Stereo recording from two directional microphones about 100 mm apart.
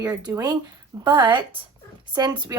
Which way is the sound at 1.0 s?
50° right (ahead or behind).